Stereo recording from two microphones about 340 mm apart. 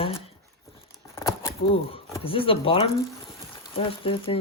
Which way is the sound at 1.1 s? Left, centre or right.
Centre.